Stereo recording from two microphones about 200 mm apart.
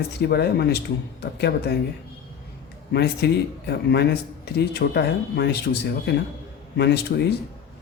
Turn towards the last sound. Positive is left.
turn(degrees=55)  # may be behind; listen again after turning